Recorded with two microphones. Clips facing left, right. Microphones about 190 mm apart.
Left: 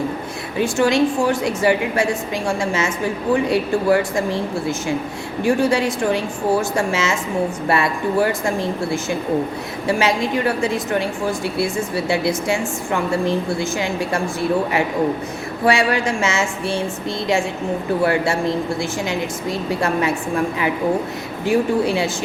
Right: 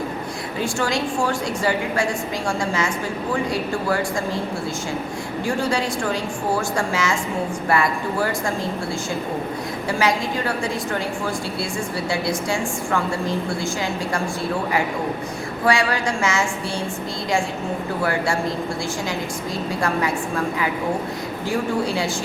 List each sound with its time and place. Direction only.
0.6 s a woman's voice: 20° left (ahead or behind)
5.4 s a woman's voice: 20° left (ahead or behind)
15.6 s a woman's voice: 20° left (ahead or behind)
18.0 s a woman's voice: 20° left (ahead or behind)
21.4 s a woman's voice: 20° left (ahead or behind)